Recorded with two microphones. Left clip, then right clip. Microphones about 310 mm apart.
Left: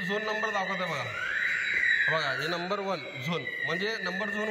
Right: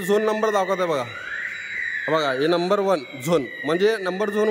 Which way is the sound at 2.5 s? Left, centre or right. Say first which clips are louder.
Right 11 dB; right.